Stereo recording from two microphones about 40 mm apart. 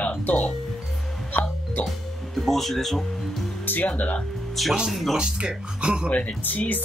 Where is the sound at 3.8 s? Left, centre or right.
Left.